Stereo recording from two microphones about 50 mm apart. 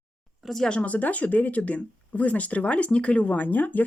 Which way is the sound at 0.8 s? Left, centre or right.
Left.